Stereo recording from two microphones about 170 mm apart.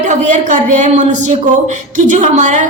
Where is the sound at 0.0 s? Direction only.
45° right (ahead or behind).